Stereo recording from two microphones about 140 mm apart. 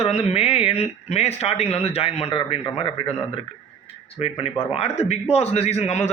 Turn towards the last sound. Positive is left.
turn(degrees=50)  # may be behind; listen again after turning